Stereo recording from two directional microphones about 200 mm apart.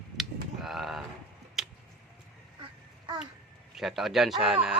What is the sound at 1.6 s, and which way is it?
Tick-tock, centre (ahead or behind).